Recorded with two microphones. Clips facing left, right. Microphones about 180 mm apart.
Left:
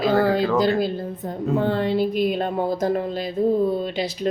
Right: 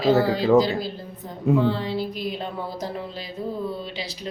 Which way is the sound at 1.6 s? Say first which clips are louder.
Left 2 dB; 55° left (ahead or behind).